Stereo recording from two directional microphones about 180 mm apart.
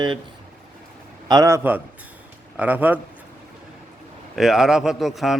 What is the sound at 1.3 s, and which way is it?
A man's voice, 20° right (ahead or behind).